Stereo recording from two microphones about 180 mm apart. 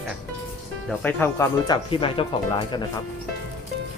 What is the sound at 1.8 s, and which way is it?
Speech, 30° left (ahead or behind).